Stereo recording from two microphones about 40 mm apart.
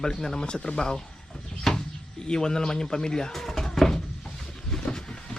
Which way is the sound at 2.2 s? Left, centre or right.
Centre.